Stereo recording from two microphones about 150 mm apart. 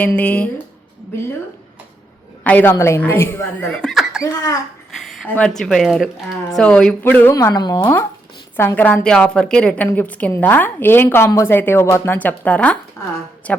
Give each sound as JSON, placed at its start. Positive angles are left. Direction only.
{"t": 0.2, "sound": "a woman's voice", "side_deg": 10}
{"t": 2.4, "sound": "a woman's voice", "side_deg": 10}
{"t": 3.7, "sound": "speech", "side_deg": 5}
{"t": 4.2, "sound": "speech", "side_deg": 25}
{"t": 5.2, "sound": "a woman's voice", "side_deg": 10}
{"t": 7.3, "sound": "speech", "side_deg": 25}
{"t": 8.5, "sound": "a woman's voice", "side_deg": 15}